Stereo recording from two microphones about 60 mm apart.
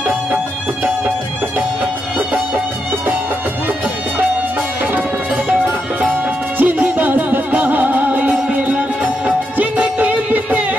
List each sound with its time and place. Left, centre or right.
2.1 s music: centre
6.6 s music: right